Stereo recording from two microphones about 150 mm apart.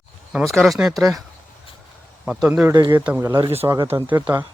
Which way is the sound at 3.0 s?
10° right (ahead or behind).